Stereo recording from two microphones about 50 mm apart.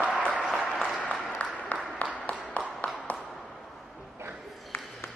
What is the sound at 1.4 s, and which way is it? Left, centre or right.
Applause, left.